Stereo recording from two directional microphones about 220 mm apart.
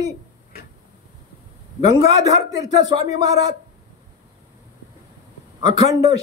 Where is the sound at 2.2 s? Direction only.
15° right (ahead or behind).